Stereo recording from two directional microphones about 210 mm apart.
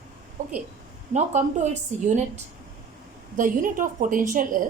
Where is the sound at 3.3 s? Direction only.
40° right (ahead or behind).